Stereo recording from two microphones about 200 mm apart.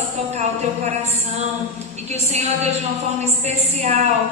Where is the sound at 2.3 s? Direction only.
35° right (ahead or behind).